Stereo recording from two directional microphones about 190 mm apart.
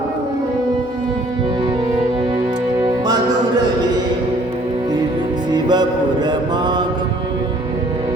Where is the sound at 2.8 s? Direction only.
20° right (ahead or behind).